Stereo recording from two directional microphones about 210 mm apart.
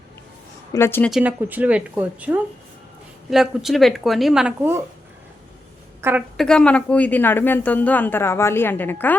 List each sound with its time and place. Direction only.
0.7 s speech: 10° left (ahead or behind)
1.1 s speech: 10° right (ahead or behind)
6.0 s a woman's voice: 10° right (ahead or behind)
6.3 s speech: 5° left (ahead or behind)